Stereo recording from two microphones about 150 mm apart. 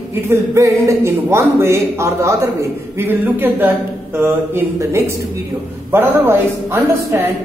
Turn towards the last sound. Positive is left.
turn(degrees=-15)  # may be behind; listen again after turning